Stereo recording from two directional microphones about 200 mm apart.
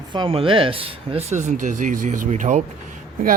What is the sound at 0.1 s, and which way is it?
Speech, 25° right (ahead or behind).